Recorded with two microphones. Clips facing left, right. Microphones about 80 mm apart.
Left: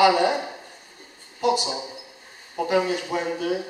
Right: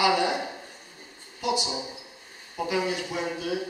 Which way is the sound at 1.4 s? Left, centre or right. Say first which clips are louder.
Left 5 dB; left.